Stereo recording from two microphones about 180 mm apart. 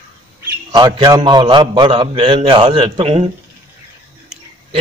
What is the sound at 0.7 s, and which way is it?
A man's voice, 25° right (ahead or behind).